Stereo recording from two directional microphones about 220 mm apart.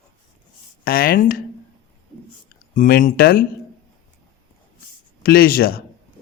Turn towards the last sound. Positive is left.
turn(degrees=40)  # may be behind; listen again after turning